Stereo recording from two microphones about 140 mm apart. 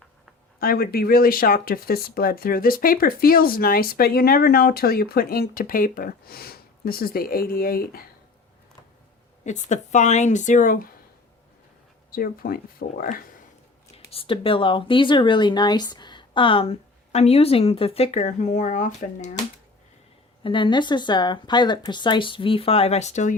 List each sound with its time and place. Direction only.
0.6 s speech: 90° left
9.4 s speech: 55° left (ahead or behind); by 10.8 s 70° left (ahead or behind)
12.1 s speech: 90° left
13.9 s speech: 45° left (ahead or behind); by 19.3 s 60° left (ahead or behind)
20.4 s speech: 35° left (ahead or behind); by 23.3 s 55° left (ahead or behind)